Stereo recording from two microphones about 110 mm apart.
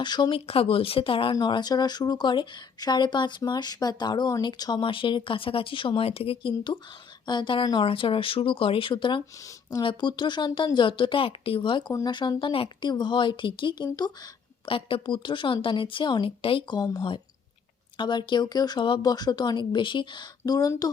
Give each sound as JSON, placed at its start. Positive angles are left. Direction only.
{"t": 0.0, "sound": "speech", "side_deg": 45}
{"t": 14.7, "sound": "speech", "side_deg": 55}
{"t": 20.4, "sound": "speech", "side_deg": 35}